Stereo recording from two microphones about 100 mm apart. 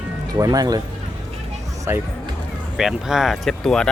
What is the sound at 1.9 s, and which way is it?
Speech, 25° right (ahead or behind).